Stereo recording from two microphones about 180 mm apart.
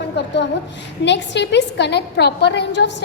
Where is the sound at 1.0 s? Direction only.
75° left (ahead or behind).